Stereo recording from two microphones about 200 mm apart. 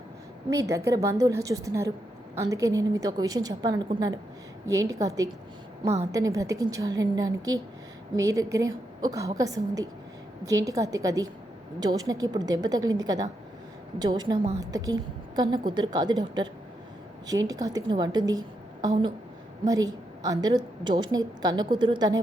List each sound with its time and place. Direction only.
0.5 s a woman's voice: 15° right (ahead or behind)
5.8 s a woman's voice: 30° right (ahead or behind)
6.1 s a woman's voice: 15° right (ahead or behind)
17.2 s a woman's voice: 20° right (ahead or behind)